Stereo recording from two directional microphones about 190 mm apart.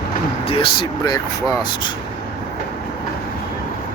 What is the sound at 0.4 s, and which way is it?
Speech, 30° left (ahead or behind).